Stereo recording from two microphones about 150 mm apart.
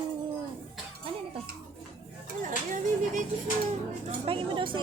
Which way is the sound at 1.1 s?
40° right (ahead or behind).